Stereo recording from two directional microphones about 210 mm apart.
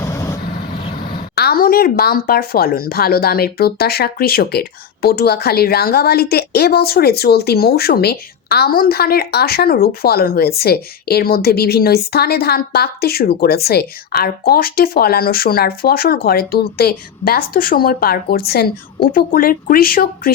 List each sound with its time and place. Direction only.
0.0 s vehicle: 15° left (ahead or behind)
1.0 s a woman's voice: 45° left (ahead or behind)